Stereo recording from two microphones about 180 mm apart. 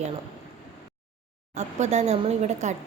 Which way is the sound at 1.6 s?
40° right (ahead or behind).